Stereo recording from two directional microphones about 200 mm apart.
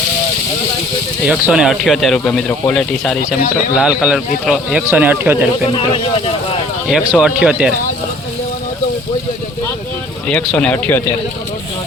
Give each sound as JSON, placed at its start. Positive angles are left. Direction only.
{"t": 1.3, "sound": "speech", "side_deg": -5}
{"t": 5.7, "sound": "speech", "side_deg": 25}
{"t": 6.8, "sound": "speech", "side_deg": -5}
{"t": 10.2, "sound": "speech", "side_deg": 5}